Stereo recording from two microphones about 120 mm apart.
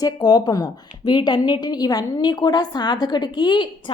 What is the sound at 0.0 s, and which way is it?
A woman's voice, 35° left (ahead or behind).